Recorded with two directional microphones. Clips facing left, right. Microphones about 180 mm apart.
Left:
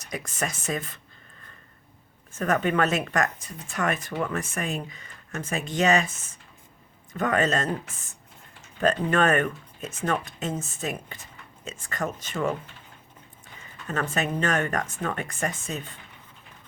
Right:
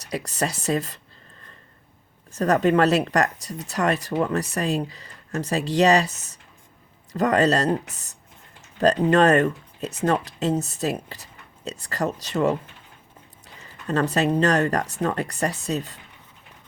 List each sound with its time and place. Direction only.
0.1 s speech: 35° right (ahead or behind)
2.3 s speech: 35° right (ahead or behind)
13.6 s speech: 35° right (ahead or behind)